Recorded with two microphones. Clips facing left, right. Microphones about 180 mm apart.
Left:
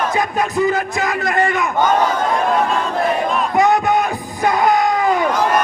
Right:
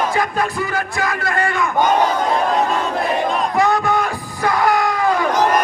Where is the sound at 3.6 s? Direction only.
20° left (ahead or behind).